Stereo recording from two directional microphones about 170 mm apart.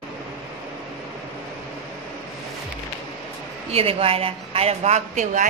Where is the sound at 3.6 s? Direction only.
35° right (ahead or behind).